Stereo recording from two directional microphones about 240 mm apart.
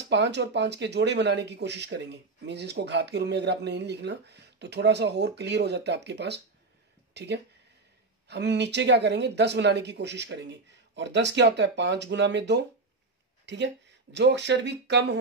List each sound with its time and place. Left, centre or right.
0.0 s speech: right